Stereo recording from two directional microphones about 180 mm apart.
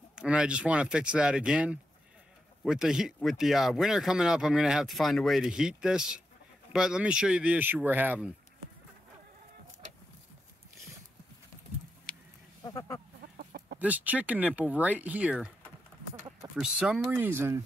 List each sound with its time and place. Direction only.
0.1 s speech: 5° right (ahead or behind)
12.6 s a sound: 15° left (ahead or behind)
13.4 s chicken: 55° right (ahead or behind)
13.7 s speech: 10° right (ahead or behind)
16.5 s speech: 5° right (ahead or behind)